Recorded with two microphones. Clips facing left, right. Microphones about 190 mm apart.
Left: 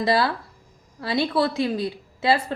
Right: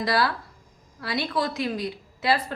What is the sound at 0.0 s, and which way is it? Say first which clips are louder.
A woman's voice: left 3 dB; 25° left (ahead or behind).